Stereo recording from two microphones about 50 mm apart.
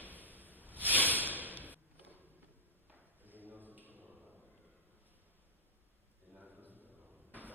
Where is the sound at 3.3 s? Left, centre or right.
Right.